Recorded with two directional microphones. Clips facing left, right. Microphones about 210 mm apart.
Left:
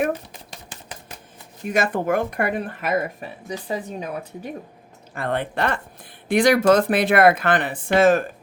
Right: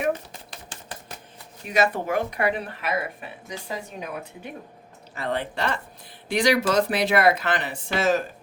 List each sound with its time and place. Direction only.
1.6 s speech: 50° left (ahead or behind)
5.1 s speech: 55° left (ahead or behind)